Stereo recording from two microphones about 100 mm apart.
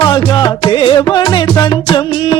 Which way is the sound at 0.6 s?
60° left (ahead or behind).